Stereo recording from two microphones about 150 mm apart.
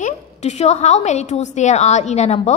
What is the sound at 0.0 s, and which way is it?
A woman's voice, 50° left (ahead or behind).